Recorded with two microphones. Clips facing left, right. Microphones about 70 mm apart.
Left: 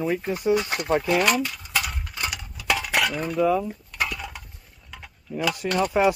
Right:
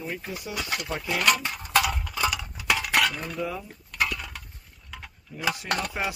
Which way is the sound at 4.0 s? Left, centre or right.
Centre.